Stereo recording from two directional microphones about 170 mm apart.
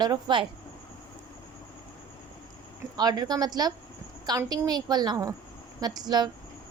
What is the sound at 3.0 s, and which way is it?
A woman's voice, 25° right (ahead or behind).